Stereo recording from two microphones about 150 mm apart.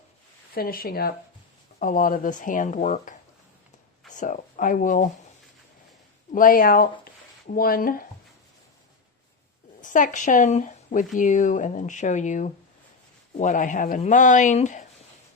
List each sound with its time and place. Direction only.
0.5 s speech: 85° left
1.8 s speech: 65° left (ahead or behind)
6.3 s speech: 70° left (ahead or behind)
9.8 s speech: 60° left (ahead or behind)